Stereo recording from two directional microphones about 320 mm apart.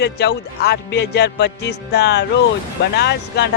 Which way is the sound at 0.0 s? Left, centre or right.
Left.